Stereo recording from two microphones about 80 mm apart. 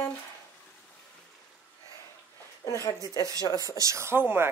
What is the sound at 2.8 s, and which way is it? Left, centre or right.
Speech, left.